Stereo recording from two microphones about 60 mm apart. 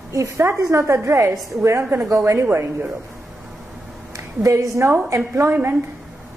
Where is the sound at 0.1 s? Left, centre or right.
Right.